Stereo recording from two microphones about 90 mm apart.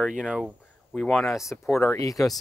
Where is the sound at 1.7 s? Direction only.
30° left (ahead or behind).